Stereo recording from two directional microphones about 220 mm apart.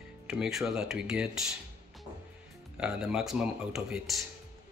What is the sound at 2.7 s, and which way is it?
Speech, 5° right (ahead or behind).